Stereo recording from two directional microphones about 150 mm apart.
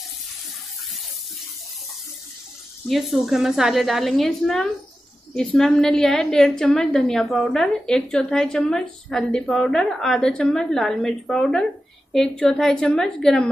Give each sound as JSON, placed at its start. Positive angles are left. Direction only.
{"t": 2.9, "sound": "a woman's voice", "side_deg": 0}